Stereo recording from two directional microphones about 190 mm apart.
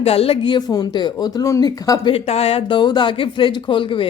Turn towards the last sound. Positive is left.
turn(degrees=25)  # may be behind; listen again after turning